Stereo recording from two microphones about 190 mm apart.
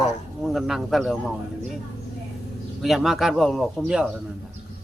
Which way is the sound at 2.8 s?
Centre (ahead or behind).